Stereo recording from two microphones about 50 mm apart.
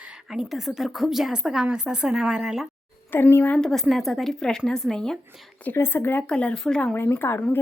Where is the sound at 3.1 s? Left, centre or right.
Left.